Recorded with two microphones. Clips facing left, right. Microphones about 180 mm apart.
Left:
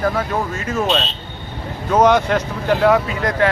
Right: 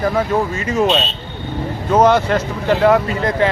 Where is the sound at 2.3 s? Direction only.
5° right (ahead or behind).